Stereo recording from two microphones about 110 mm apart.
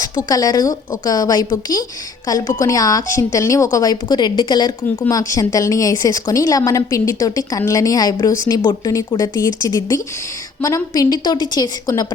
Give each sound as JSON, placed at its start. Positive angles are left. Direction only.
{"t": 0.3, "sound": "a woman's voice", "side_deg": 35}
{"t": 5.0, "sound": "a woman's voice", "side_deg": 30}